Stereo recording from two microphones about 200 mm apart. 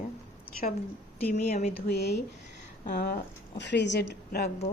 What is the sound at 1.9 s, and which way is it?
A woman's voice, 55° left (ahead or behind).